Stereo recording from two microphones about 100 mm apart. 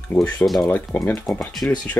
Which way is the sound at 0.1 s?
15° left (ahead or behind).